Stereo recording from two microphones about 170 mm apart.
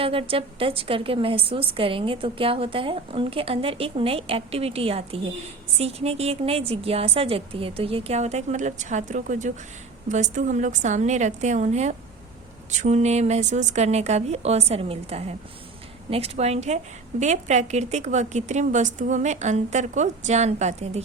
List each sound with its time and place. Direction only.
0.0 s a woman's voice: 30° right (ahead or behind)